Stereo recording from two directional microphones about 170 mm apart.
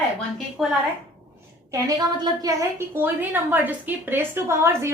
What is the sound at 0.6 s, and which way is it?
Speech, centre (ahead or behind).